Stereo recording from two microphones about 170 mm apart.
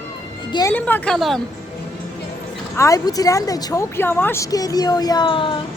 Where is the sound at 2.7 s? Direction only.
20° left (ahead or behind).